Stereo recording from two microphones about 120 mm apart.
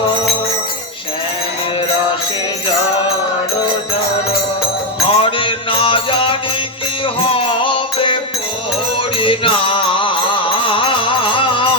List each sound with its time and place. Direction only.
5.0 s music: 50° left (ahead or behind)